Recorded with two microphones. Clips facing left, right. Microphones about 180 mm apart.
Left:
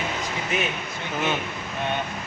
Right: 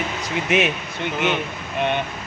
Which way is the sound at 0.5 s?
80° right.